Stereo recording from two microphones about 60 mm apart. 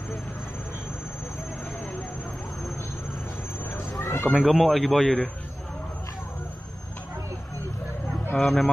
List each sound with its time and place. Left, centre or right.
4.0 s a sound: left
4.3 s speech: centre
8.4 s speech: centre